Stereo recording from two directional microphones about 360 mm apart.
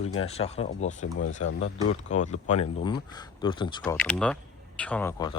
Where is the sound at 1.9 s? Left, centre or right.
Centre.